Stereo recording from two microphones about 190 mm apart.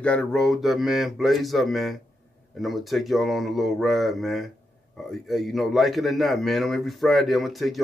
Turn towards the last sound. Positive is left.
turn(degrees=0)  # may be behind; listen again after turning